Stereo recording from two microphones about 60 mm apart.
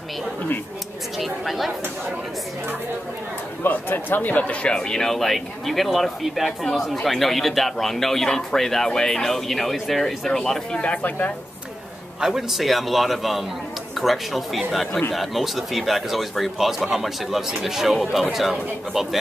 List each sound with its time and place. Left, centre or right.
1.1 s speech: centre
3.6 s speech: left
4.7 s speech: centre
10.8 s speech: left
12.2 s speech: centre
14.9 s speech: centre
15.1 s speech: centre